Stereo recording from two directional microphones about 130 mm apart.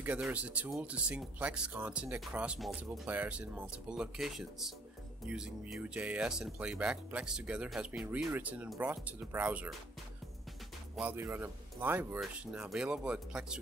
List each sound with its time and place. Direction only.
0.0 s speech: 10° right (ahead or behind)
11.0 s speech: 15° right (ahead or behind)
12.2 s speech: 5° right (ahead or behind)